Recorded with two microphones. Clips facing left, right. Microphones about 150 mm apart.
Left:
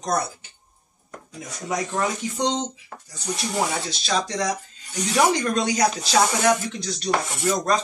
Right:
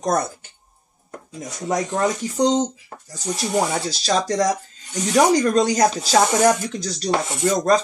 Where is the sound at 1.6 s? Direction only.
40° right (ahead or behind).